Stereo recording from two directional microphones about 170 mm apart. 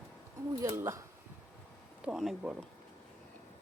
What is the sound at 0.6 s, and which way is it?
Speech, 20° right (ahead or behind).